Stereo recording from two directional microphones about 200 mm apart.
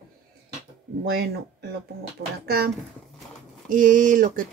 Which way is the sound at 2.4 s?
50° right (ahead or behind).